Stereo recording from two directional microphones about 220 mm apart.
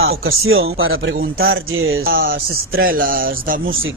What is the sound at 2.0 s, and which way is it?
Speech, 40° right (ahead or behind).